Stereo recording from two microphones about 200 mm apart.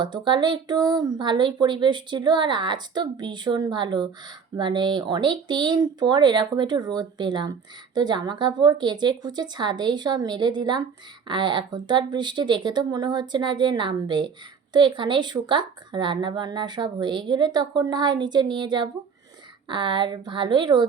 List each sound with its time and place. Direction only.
0.0 s speech: 25° right (ahead or behind)